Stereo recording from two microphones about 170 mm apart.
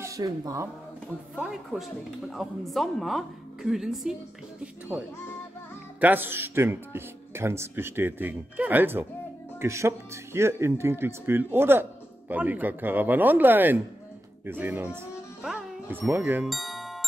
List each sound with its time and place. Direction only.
0.0 s speech: 20° right (ahead or behind)
1.3 s a woman's voice: 5° right (ahead or behind)
16.4 s music: centre (ahead or behind)